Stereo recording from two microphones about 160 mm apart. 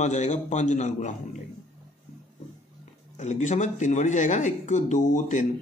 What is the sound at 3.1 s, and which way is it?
Speech, 50° left (ahead or behind).